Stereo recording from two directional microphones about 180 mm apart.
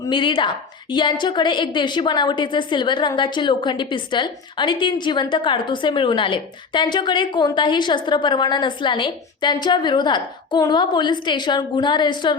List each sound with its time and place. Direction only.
0.0 s a woman's voice: 25° left (ahead or behind)